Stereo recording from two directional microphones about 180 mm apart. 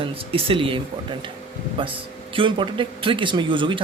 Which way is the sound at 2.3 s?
30° right (ahead or behind).